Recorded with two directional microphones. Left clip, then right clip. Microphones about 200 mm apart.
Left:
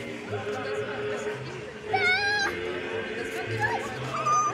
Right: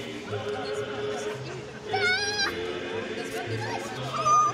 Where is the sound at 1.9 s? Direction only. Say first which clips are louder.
Left 2 dB; 60° right (ahead or behind).